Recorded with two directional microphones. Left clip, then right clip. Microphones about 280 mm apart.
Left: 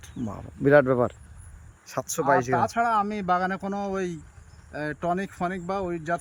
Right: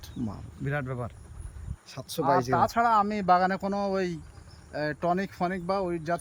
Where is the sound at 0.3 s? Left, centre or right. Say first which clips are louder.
Left 17 dB; centre.